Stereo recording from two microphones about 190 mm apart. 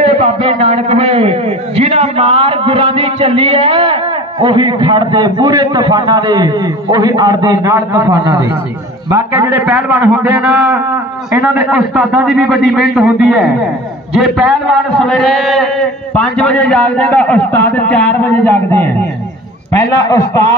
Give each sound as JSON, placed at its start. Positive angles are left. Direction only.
{"t": 0.0, "sound": "a man's voice", "side_deg": -30}